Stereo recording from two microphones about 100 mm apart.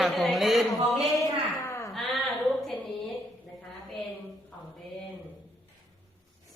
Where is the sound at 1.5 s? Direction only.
25° left (ahead or behind).